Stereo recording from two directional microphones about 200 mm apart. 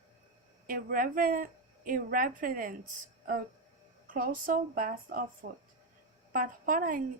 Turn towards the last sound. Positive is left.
turn(degrees=-40)  # may be behind; listen again after turning